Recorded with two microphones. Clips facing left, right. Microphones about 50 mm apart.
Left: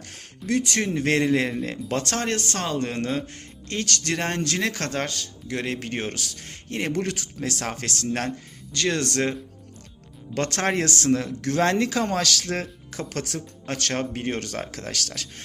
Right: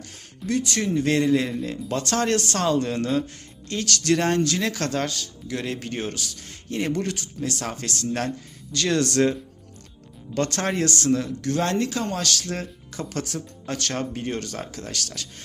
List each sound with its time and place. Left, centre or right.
0.0 s speech: left
2.2 s speech: left
2.7 s speech: left
4.0 s speech: left
4.4 s speech: left
7.6 s speech: left
8.7 s speech: left
10.3 s speech: left
10.8 s speech: left
11.1 s speech: left
12.1 s speech: left
14.7 s speech: left